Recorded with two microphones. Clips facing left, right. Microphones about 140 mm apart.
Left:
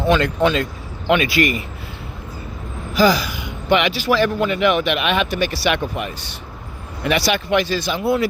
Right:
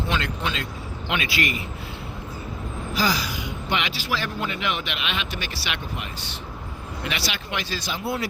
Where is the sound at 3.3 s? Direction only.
60° left (ahead or behind).